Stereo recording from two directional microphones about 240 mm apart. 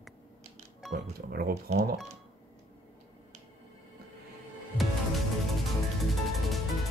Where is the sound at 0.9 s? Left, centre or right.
Right.